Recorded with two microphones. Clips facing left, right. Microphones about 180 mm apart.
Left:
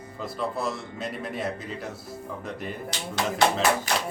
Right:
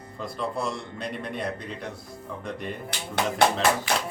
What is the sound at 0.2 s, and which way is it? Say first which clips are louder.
A man's voice: even; centre (ahead or behind).